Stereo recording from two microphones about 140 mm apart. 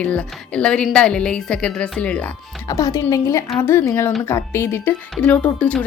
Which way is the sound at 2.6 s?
25° left (ahead or behind).